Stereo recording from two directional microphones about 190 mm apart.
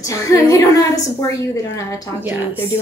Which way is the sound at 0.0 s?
15° left (ahead or behind).